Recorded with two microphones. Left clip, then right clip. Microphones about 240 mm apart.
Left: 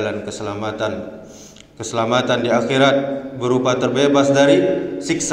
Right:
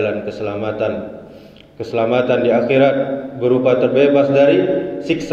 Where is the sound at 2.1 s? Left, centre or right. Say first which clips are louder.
Right 2 dB; left.